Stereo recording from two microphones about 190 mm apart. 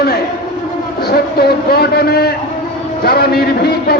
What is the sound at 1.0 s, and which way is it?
A man's voice, 55° left (ahead or behind).